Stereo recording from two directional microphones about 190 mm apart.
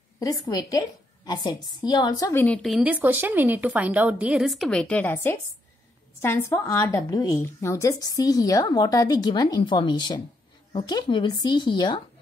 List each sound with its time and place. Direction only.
0.2 s a woman's voice: 20° left (ahead or behind)
2.4 s a woman's voice: 5° left (ahead or behind); by 12.0 s 25° left (ahead or behind)